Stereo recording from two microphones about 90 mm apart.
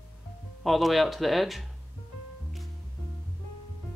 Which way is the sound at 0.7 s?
Centre (ahead or behind).